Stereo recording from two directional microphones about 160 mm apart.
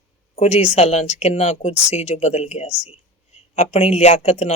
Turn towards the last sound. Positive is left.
turn(degrees=45)  # may be behind; listen again after turning